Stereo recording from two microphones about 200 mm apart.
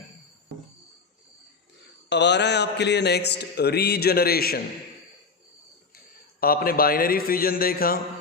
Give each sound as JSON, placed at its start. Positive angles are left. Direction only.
{"t": 2.0, "sound": "speech", "side_deg": 60}
{"t": 6.4, "sound": "a man's voice", "side_deg": 45}